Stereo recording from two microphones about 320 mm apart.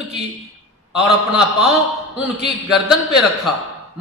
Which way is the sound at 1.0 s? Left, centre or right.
Centre.